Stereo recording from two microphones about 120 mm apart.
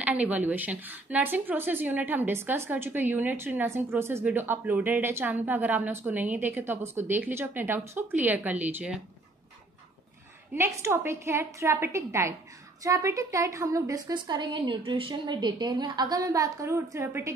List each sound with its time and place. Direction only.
0.0 s a woman's voice: 10° right (ahead or behind)
10.5 s a woman's voice: 20° right (ahead or behind)